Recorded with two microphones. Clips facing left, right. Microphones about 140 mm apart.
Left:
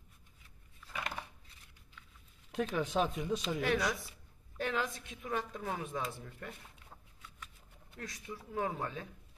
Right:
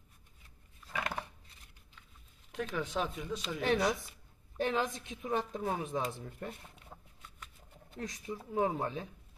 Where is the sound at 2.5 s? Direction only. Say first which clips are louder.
Left 3 dB; 15° left (ahead or behind).